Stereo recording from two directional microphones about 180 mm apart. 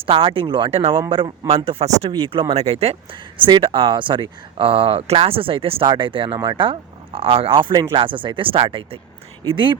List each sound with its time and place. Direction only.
0.0 s speech: 30° right (ahead or behind)